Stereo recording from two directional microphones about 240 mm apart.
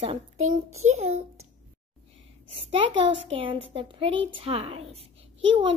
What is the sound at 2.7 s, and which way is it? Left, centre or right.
A child's voice, right.